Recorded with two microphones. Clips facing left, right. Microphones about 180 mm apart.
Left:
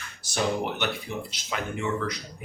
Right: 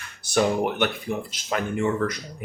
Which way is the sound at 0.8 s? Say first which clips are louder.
Right 5 dB; 50° right (ahead or behind).